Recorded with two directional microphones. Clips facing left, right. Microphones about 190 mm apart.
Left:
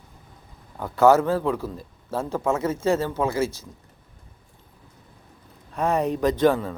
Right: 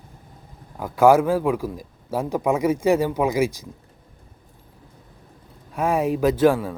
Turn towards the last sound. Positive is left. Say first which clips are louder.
# right 2 dB
turn(degrees=-10)  # may be behind; listen again after turning